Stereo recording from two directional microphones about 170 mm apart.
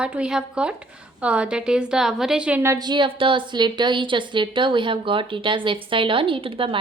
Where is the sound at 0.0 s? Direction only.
5° right (ahead or behind).